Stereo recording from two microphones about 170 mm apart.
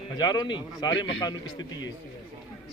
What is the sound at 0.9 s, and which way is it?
Speech, 90° left.